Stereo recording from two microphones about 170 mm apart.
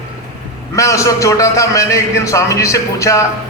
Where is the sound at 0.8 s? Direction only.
20° left (ahead or behind).